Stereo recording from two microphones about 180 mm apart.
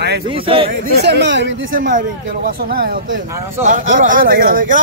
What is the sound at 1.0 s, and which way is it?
Speech, 75° right (ahead or behind).